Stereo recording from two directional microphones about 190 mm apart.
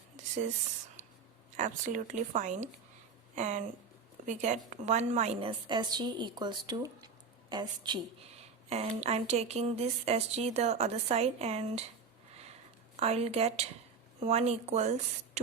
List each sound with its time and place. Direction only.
1.5 s a woman's voice: 40° right (ahead or behind)
12.3 s a sound: 35° right (ahead or behind)
13.0 s a woman's voice: 35° right (ahead or behind)